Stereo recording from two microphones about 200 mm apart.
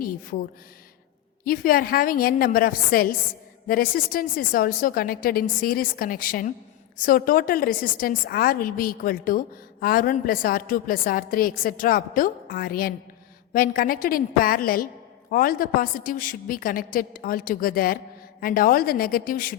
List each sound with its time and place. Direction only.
0.0 s speech: 45° left (ahead or behind)
1.5 s a woman's voice: 45° left (ahead or behind)